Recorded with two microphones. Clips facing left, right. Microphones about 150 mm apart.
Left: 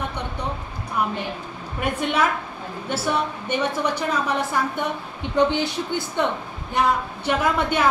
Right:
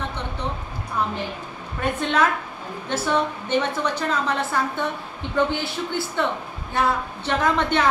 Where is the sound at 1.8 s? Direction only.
10° left (ahead or behind).